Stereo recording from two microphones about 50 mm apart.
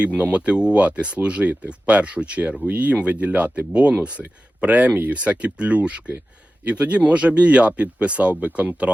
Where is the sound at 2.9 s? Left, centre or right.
Right.